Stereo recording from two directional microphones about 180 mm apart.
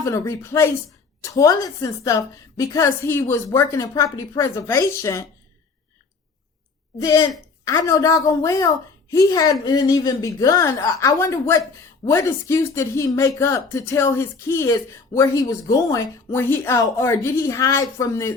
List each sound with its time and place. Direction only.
0.0 s a woman's voice: 15° left (ahead or behind)
7.0 s a woman's voice: 20° left (ahead or behind)